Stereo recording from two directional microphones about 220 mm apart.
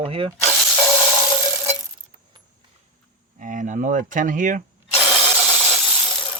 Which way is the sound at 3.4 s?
35° right (ahead or behind).